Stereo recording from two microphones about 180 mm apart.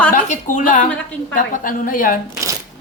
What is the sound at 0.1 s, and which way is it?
A woman's voice, 45° left (ahead or behind).